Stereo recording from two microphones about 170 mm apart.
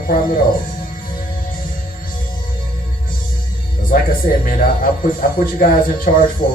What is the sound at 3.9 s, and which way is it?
Speech, 55° left (ahead or behind).